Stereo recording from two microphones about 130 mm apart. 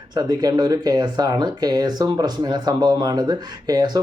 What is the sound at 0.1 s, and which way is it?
Speech, 30° right (ahead or behind).